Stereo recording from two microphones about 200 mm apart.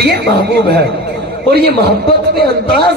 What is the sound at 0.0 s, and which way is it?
A man's voice, 55° right (ahead or behind).